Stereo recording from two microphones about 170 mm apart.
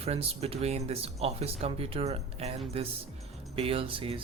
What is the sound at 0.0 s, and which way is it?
Speech, 35° right (ahead or behind).